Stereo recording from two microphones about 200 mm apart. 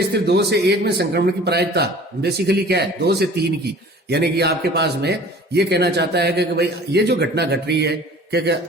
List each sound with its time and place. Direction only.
0.0 s a man's voice: 55° right (ahead or behind)